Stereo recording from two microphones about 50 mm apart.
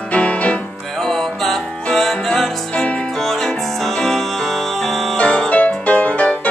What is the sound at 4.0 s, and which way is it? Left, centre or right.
Music, centre.